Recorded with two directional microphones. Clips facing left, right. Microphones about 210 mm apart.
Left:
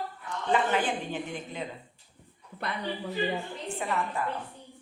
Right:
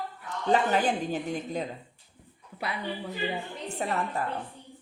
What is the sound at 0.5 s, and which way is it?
A woman's voice, 40° right (ahead or behind).